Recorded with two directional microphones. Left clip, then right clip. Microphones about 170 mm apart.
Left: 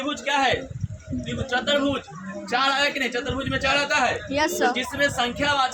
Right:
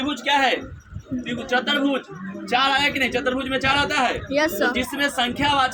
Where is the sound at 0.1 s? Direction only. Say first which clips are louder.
Right 2 dB; 15° left (ahead or behind).